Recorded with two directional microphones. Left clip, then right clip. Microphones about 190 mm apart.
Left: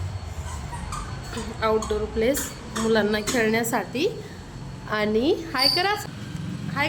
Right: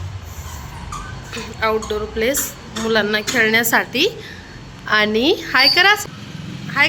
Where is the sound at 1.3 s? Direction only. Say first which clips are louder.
Right 4 dB; 10° left (ahead or behind).